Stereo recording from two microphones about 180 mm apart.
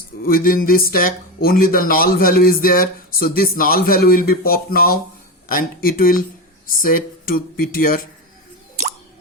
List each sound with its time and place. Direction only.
0.2 s speech: 55° left (ahead or behind)